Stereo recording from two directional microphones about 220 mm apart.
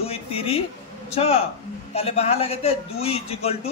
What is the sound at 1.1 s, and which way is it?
Speech, 30° left (ahead or behind).